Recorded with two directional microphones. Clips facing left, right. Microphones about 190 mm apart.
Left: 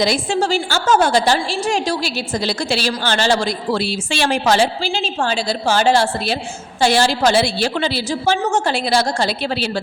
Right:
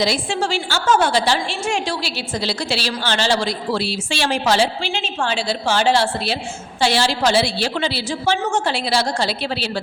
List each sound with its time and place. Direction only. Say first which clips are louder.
0.0 s a woman's voice: left 3 dB; 45° left (ahead or behind)
4.9 s a woman's voice: left 3 dB; 35° left (ahead or behind)